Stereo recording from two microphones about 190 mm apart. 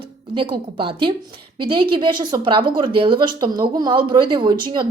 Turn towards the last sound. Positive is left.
turn(degrees=-25)  # may be behind; listen again after turning